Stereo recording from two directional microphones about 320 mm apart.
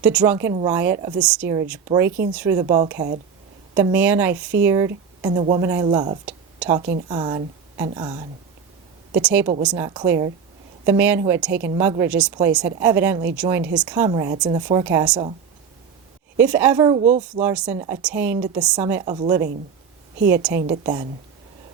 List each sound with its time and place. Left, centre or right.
0.0 s speech: centre
16.4 s speech: centre; by 17.2 s right
17.3 s speech: centre
20.6 s a woman's voice: right